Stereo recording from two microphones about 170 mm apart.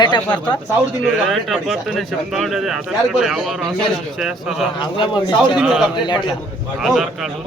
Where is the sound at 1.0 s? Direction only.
Centre (ahead or behind).